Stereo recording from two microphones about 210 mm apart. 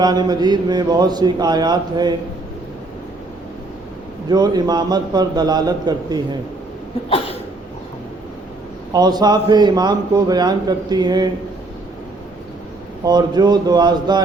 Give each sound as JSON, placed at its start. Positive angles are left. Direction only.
{"t": 0.0, "sound": "a man's voice", "side_deg": -20}
{"t": 4.3, "sound": "a man's voice", "side_deg": -20}
{"t": 8.9, "sound": "a man's voice", "side_deg": -20}
{"t": 13.1, "sound": "a man's voice", "side_deg": -20}